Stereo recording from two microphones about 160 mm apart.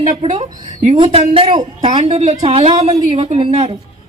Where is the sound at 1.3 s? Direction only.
40° right (ahead or behind).